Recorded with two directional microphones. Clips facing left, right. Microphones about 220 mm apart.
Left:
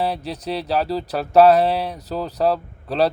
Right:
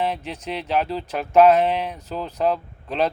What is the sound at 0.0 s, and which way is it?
Speech, 35° left (ahead or behind).